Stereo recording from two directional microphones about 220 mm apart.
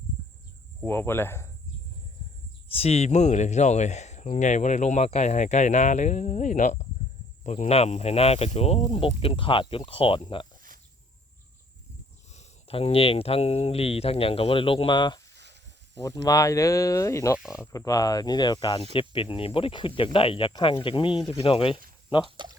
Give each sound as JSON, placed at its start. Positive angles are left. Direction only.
{"t": 0.9, "sound": "speech", "side_deg": 10}
{"t": 2.7, "sound": "speech", "side_deg": 30}
{"t": 12.3, "sound": "speech", "side_deg": 30}
{"t": 17.3, "sound": "speech", "side_deg": -5}
{"t": 17.7, "sound": "speech", "side_deg": 15}
{"t": 22.4, "sound": "speech", "side_deg": -20}